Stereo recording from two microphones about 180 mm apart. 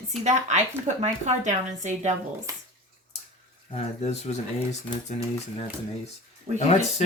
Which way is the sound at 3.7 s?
35° left (ahead or behind).